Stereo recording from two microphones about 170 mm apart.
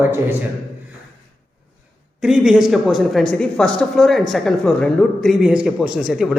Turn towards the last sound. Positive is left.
turn(degrees=0)  # may be behind; listen again after turning